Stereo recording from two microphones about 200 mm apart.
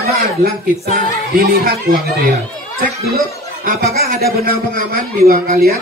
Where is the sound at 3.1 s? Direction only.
50° right (ahead or behind).